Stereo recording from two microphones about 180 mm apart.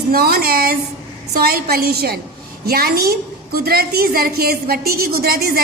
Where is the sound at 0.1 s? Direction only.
55° right (ahead or behind).